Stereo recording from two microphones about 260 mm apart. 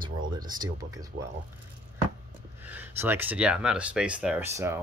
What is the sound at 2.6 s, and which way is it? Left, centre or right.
Speech, centre.